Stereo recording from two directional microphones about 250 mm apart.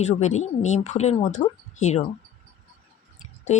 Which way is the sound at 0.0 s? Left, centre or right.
Left.